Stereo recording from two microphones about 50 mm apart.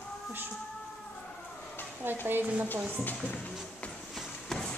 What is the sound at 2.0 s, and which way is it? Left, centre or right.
Speech, right.